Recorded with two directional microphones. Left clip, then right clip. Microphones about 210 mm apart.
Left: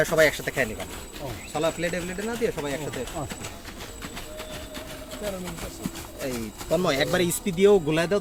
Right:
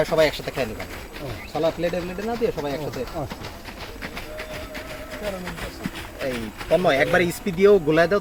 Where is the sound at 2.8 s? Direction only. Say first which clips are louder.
Right 3 dB; 40° left (ahead or behind).